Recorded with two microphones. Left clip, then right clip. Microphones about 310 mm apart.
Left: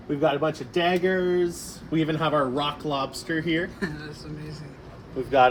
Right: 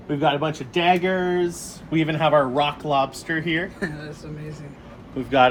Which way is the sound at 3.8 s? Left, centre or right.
Centre.